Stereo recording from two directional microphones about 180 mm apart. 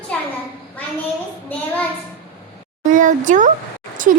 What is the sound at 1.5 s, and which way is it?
Child singing, 10° left (ahead or behind).